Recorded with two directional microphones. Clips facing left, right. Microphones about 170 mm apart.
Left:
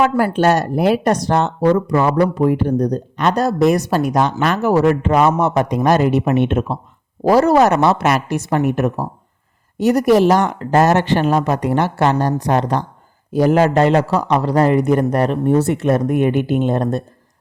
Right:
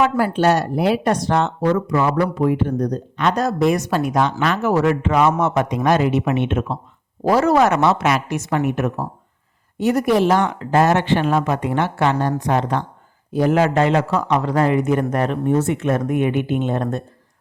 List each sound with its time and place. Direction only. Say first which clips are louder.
0.3 s speech: left 2 dB; 45° left (ahead or behind)